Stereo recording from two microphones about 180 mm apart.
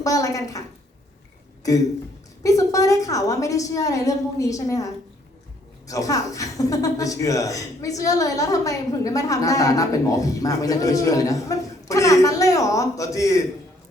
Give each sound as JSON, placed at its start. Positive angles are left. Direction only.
{"t": 0.0, "sound": "speech", "side_deg": 20}
{"t": 1.6, "sound": "a woman's voice", "side_deg": 20}
{"t": 5.9, "sound": "speech", "side_deg": 20}